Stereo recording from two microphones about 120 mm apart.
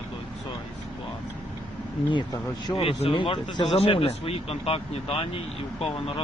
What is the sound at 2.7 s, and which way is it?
Speech, 50° left (ahead or behind).